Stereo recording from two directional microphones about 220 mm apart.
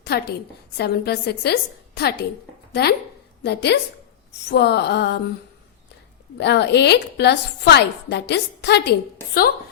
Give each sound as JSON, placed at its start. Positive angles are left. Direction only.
{"t": 0.0, "sound": "a woman's voice", "side_deg": 50}
{"t": 3.4, "sound": "a woman's voice", "side_deg": 50}
{"t": 6.3, "sound": "a woman's voice", "side_deg": 50}